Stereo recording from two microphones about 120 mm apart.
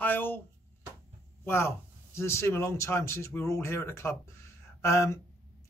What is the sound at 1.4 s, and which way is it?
Speech, 20° left (ahead or behind).